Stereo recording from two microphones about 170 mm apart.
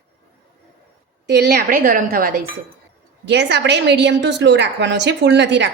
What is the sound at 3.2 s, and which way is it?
A woman's voice, 90° right.